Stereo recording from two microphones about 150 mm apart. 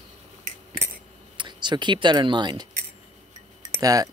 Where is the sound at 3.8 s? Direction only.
25° right (ahead or behind).